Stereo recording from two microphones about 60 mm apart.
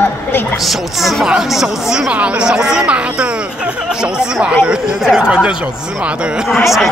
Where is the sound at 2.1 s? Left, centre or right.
Centre.